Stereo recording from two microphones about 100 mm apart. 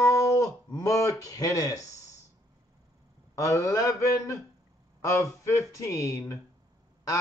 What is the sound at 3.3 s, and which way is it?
Speech, 30° left (ahead or behind).